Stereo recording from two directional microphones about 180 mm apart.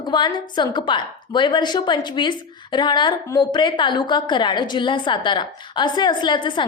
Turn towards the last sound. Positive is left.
turn(degrees=25)  # may be behind; listen again after turning